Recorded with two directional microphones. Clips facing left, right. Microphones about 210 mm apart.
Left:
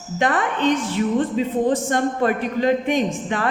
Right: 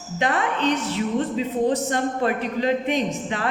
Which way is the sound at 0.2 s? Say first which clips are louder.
Left 2 dB; 50° left (ahead or behind).